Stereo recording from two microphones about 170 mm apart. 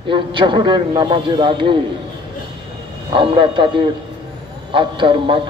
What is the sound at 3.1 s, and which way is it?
A man's voice, 30° right (ahead or behind).